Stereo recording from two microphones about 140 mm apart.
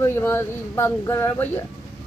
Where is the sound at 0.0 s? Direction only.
20° left (ahead or behind).